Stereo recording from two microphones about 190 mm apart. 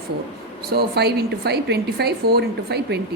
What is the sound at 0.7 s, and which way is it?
A woman's voice, 60° right (ahead or behind).